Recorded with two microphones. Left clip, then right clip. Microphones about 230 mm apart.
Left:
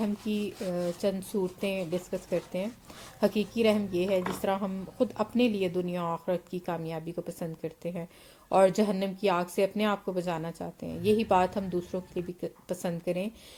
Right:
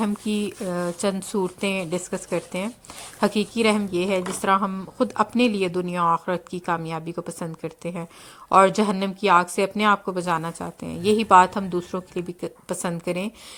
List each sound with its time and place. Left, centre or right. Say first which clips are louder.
0.0 s speech: right 6 dB; right